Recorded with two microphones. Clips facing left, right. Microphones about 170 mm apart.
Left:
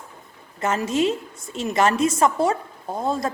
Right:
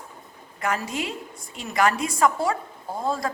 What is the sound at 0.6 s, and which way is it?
A woman's voice, 25° left (ahead or behind).